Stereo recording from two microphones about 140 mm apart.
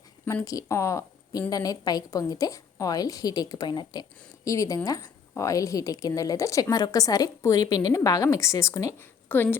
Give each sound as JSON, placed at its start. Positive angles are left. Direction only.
{"t": 0.4, "sound": "a woman's voice", "side_deg": 25}